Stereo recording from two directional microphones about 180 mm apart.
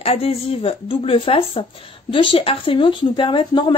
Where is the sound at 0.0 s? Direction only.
35° left (ahead or behind).